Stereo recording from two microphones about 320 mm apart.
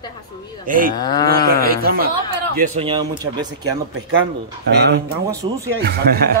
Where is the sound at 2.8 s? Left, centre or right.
Centre.